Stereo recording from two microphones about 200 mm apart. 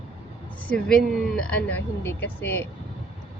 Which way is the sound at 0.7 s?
5° left (ahead or behind).